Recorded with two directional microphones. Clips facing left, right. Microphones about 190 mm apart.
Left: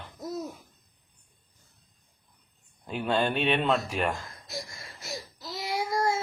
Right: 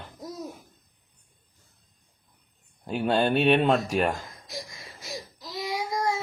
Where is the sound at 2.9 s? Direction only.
40° right (ahead or behind).